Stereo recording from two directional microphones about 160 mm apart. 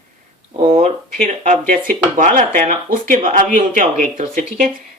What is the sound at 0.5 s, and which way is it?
Speech, 35° right (ahead or behind).